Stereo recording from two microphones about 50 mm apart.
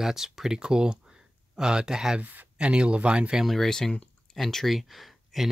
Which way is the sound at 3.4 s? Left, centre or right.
Centre.